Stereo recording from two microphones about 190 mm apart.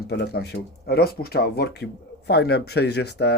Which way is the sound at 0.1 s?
60° left (ahead or behind).